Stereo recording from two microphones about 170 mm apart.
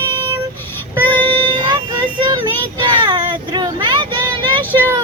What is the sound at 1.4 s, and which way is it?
Child singing, 25° right (ahead or behind).